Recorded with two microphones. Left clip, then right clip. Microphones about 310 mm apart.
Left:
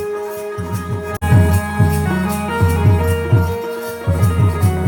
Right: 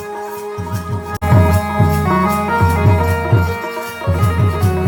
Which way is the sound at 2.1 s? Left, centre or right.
Centre.